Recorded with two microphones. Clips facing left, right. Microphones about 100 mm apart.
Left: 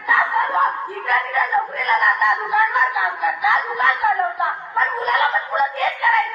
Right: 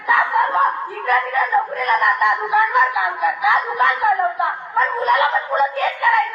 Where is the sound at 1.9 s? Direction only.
20° right (ahead or behind).